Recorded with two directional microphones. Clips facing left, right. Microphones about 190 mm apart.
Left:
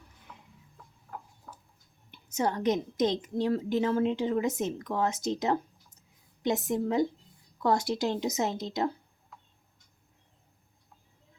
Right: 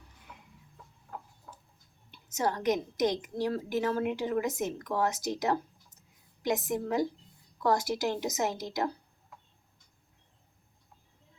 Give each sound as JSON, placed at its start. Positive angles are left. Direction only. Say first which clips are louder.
{"t": 2.0, "sound": "a woman's voice", "louder": "left 1 dB", "side_deg": 20}